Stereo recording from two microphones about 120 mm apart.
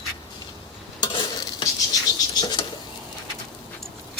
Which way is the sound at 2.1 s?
35° left (ahead or behind).